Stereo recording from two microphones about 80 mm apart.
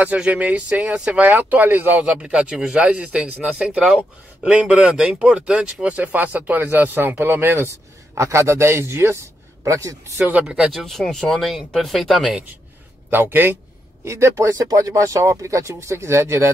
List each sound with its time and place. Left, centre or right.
0.0 s speech: centre
2.5 s speech: centre
2.8 s a man's voice: centre; by 10.1 s right
10.1 s speech: right
10.4 s speech: centre
10.7 s speech: centre
13.1 s speech: right
14.0 s speech: right